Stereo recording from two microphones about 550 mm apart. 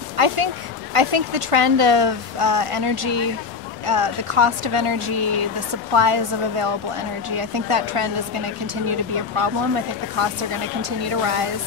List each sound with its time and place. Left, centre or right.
0.2 s speech: right